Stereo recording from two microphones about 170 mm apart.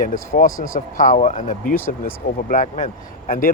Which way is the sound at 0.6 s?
50° left (ahead or behind).